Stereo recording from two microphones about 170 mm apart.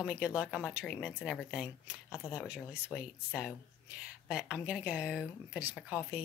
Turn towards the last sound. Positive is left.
turn(degrees=-5)  # may be behind; listen again after turning